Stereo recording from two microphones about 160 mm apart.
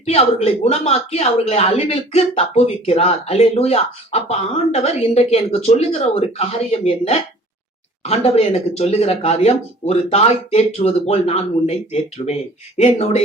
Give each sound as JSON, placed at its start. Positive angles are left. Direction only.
{"t": 0.0, "sound": "speech", "side_deg": 40}